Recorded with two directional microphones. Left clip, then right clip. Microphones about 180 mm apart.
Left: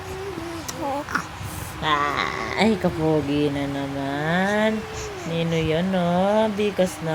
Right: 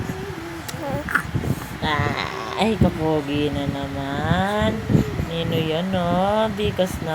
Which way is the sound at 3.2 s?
20° left (ahead or behind).